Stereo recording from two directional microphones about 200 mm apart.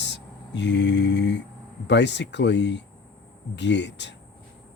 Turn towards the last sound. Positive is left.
turn(degrees=60)  # may be behind; listen again after turning